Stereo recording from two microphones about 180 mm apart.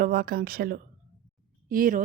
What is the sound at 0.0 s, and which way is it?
A woman's voice, 55° right (ahead or behind).